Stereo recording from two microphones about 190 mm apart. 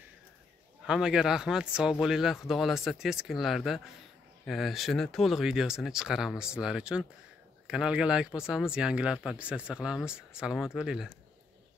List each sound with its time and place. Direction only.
0.8 s speech: 5° right (ahead or behind)